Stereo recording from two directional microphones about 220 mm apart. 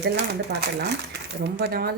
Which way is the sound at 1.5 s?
45° right (ahead or behind).